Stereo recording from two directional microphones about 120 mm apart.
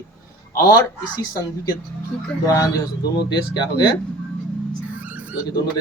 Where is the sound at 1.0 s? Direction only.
35° left (ahead or behind).